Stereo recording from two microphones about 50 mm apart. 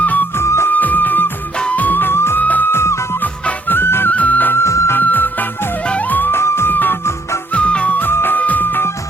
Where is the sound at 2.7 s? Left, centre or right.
Left.